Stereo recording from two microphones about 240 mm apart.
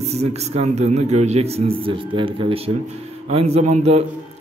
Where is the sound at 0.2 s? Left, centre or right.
Right.